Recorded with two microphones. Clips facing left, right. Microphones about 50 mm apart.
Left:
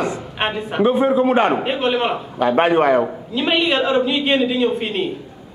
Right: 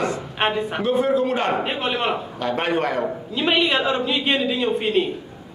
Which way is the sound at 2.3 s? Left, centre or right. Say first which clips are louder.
Left 11 dB; left.